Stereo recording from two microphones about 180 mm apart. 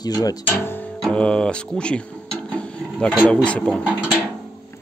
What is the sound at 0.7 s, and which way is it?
Music, 5° left (ahead or behind).